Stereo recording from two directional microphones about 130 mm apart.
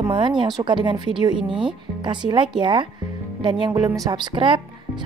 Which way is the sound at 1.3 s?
5° right (ahead or behind).